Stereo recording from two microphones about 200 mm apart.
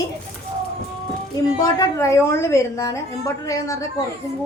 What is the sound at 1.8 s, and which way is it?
A woman's voice, 15° left (ahead or behind).